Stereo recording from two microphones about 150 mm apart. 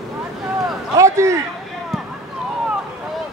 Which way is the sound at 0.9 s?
20° right (ahead or behind).